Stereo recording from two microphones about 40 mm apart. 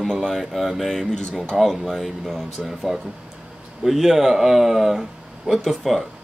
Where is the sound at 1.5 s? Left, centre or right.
Centre.